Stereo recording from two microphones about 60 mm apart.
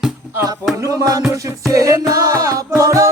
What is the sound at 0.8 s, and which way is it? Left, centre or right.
Music, right.